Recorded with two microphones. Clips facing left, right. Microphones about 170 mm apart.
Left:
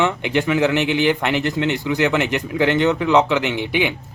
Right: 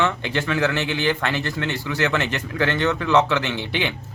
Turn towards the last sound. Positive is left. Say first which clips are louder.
# left 5 dB
turn(degrees=15)  # may be behind; listen again after turning